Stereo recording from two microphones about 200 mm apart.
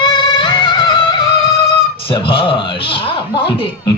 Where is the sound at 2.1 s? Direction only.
25° left (ahead or behind).